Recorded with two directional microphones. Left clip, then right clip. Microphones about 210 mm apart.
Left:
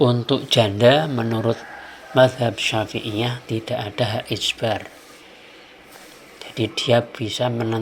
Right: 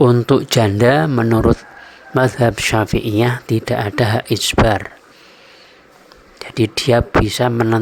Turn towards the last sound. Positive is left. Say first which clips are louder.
# right 7 dB
turn(degrees=-40)  # may be behind; listen again after turning